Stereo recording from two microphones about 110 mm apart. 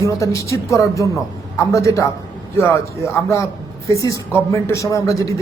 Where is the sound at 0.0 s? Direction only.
30° left (ahead or behind).